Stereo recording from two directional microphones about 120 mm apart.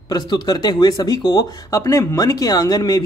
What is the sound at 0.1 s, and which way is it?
Speech, 35° left (ahead or behind).